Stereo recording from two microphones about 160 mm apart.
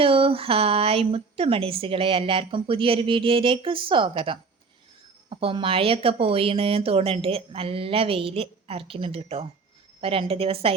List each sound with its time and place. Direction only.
0.0 s a woman's voice: 35° right (ahead or behind)